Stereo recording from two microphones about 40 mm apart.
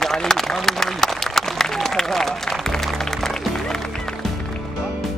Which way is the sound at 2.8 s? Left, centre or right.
Centre.